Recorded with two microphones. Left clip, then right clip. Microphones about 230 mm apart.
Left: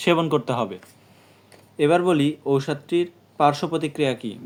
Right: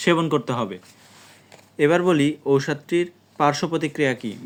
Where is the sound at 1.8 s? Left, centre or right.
Right.